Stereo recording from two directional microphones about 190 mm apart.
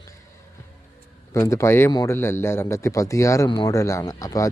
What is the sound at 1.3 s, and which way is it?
A man's voice, 15° left (ahead or behind).